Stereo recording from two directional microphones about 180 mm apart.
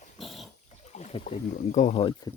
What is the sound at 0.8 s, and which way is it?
Speech, 40° left (ahead or behind).